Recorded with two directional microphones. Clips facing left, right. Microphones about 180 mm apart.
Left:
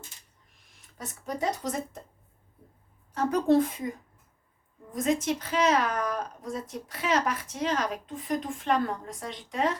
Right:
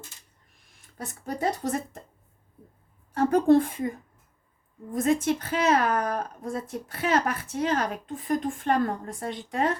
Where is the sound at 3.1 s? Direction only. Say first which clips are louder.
Right 4 dB; 55° right (ahead or behind).